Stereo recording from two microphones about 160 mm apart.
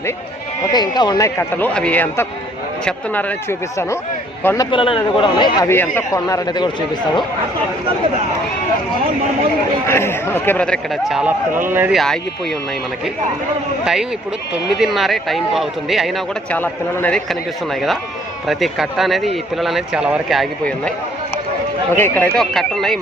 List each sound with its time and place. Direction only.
0.6 s speech: 25° left (ahead or behind); by 3.3 s 10° left (ahead or behind)
4.4 s a man's voice: 20° left (ahead or behind)
5.6 s speech: 15° left (ahead or behind)
9.8 s speech: 15° left (ahead or behind)
11.2 s a man's voice: 10° right (ahead or behind)
11.9 s a man's voice: 5° left (ahead or behind)
13.8 s a man's voice: 5° right (ahead or behind)
18.4 s a man's voice: centre (ahead or behind)
21.9 s a man's voice: 15° left (ahead or behind)